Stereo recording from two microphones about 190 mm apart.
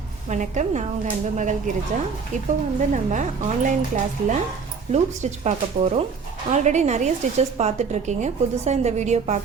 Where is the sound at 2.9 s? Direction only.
40° right (ahead or behind).